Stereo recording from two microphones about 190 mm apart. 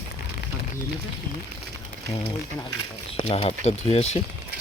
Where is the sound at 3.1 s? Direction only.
30° left (ahead or behind).